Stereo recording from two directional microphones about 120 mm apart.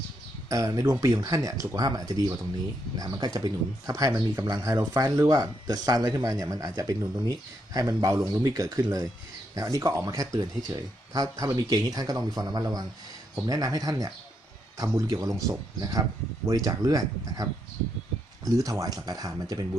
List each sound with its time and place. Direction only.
0.4 s speech: 25° right (ahead or behind)
15.1 s speech: 30° right (ahead or behind)